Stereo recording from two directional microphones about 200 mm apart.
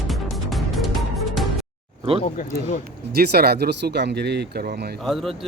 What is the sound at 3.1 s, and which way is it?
Speech, 50° right (ahead or behind).